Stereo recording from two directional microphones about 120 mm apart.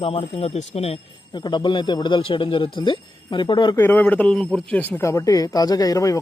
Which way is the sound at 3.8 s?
15° left (ahead or behind).